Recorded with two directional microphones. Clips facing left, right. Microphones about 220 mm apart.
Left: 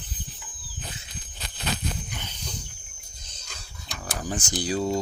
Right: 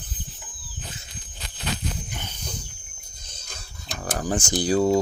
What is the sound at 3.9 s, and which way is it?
Speech, 50° right (ahead or behind).